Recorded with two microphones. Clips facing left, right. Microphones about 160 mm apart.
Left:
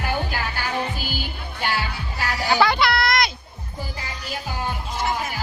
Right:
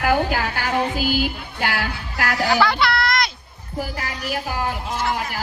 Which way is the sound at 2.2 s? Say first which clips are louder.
Right 5 dB; 90° right.